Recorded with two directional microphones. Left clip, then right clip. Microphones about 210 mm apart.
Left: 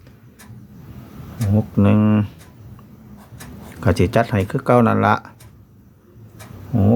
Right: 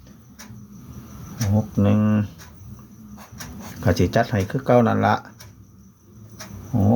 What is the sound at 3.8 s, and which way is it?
Speech, 20° left (ahead or behind).